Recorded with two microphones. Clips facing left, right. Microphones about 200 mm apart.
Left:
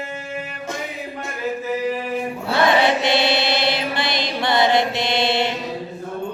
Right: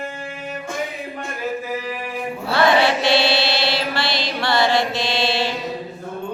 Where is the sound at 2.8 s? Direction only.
20° left (ahead or behind).